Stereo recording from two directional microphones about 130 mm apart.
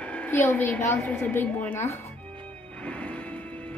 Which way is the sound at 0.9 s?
10° left (ahead or behind).